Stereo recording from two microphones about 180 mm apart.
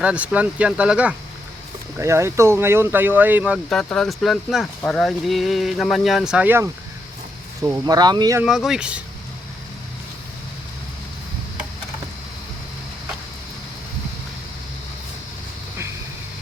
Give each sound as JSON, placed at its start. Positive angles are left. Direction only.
{"t": 0.0, "sound": "speech", "side_deg": -5}
{"t": 3.7, "sound": "speech", "side_deg": 5}
{"t": 7.6, "sound": "speech", "side_deg": -20}
{"t": 8.4, "sound": "speech", "side_deg": 0}